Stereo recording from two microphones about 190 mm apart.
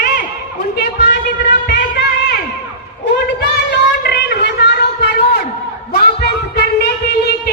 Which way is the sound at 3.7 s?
60° left (ahead or behind).